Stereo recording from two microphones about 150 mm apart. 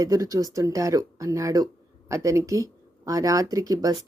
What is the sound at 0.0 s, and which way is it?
Speech, 20° right (ahead or behind).